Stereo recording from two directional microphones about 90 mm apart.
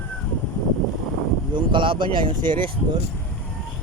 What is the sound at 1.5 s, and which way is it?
Speech, 65° right (ahead or behind).